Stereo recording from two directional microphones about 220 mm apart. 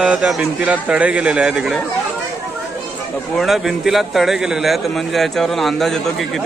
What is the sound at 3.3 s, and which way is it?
A man's voice, centre (ahead or behind).